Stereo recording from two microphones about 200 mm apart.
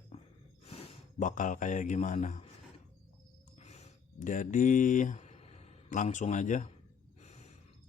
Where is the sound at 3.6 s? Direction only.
35° left (ahead or behind).